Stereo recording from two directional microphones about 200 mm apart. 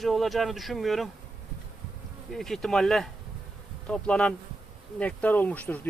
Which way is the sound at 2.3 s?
Centre (ahead or behind).